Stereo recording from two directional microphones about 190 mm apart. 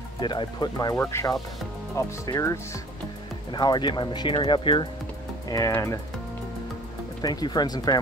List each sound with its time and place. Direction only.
0.2 s speech: 25° left (ahead or behind)
7.2 s speech: 20° left (ahead or behind)